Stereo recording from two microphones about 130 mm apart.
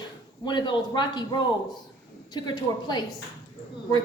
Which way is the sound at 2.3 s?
35° left (ahead or behind).